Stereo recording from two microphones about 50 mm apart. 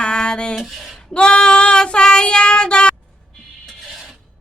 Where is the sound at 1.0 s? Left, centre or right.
Centre.